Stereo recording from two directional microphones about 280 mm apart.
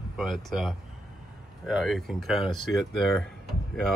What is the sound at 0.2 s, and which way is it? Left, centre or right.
Speech, centre.